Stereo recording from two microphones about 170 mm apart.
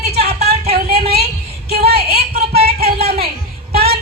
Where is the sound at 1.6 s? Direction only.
65° right (ahead or behind).